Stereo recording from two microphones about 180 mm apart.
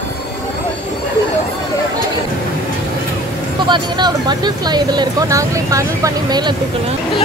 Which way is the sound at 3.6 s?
25° right (ahead or behind).